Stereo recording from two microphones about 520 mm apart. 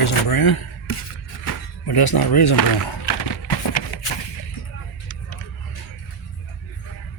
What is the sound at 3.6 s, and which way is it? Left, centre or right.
Run, left.